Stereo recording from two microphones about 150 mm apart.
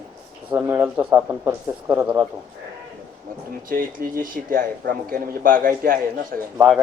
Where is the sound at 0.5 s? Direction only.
15° right (ahead or behind).